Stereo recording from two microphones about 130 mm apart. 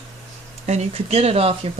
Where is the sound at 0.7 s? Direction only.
55° right (ahead or behind).